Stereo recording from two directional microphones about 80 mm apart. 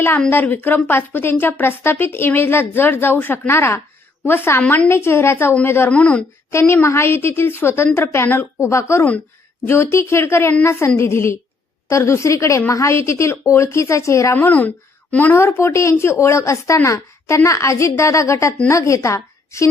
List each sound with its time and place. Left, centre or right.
0.3 s a woman's voice: left
4.6 s speech: centre
4.9 s speech: left
5.9 s speech: centre
6.5 s a woman's voice: left
14.3 s a woman's voice: left